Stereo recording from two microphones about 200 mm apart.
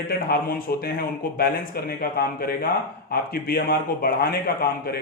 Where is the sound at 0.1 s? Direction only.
50° left (ahead or behind).